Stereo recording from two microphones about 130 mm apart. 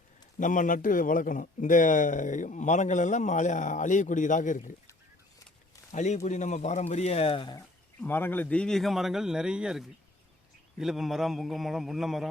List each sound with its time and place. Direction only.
0.3 s a man's voice: 85° left
5.9 s speech: 65° left (ahead or behind); by 7.5 s 45° left (ahead or behind)
8.0 s speech: 15° left (ahead or behind); by 12.3 s centre (ahead or behind)